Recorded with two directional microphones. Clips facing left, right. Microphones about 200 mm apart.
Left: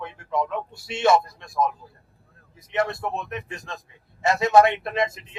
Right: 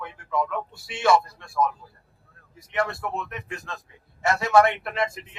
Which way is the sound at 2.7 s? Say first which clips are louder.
Left 2 dB; 20° left (ahead or behind).